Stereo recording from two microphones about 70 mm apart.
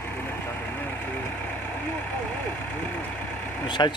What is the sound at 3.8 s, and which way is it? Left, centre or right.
Speech, left.